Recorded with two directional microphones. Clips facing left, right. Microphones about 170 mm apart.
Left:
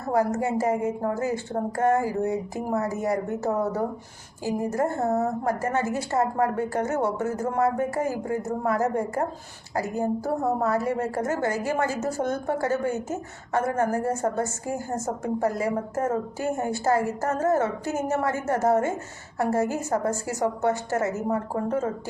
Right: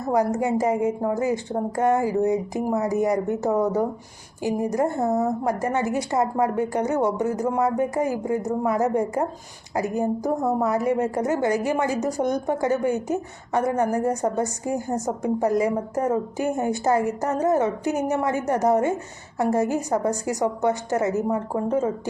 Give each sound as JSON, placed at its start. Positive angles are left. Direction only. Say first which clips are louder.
{"t": 0.0, "sound": "a woman's voice", "louder": "right 2 dB", "side_deg": -15}